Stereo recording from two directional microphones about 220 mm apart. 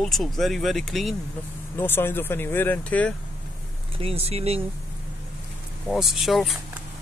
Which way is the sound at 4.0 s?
25° right (ahead or behind).